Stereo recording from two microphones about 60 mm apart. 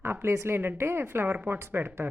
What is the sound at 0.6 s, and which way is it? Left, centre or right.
Speech, right.